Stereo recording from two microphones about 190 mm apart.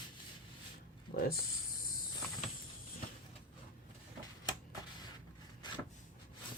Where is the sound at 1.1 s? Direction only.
50° left (ahead or behind).